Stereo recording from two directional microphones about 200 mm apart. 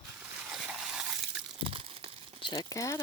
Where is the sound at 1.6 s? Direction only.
25° right (ahead or behind).